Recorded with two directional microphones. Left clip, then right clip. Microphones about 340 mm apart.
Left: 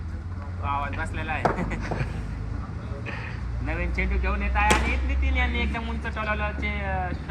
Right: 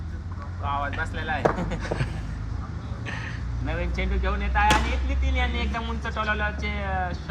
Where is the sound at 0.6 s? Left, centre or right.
Right.